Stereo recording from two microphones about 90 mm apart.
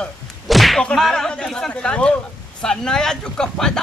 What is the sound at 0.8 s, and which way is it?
Speech, 5° left (ahead or behind).